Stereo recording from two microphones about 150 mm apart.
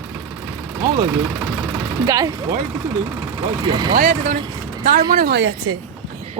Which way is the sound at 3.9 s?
70° right (ahead or behind).